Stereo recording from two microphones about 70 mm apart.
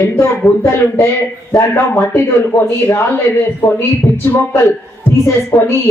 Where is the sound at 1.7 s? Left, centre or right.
Left.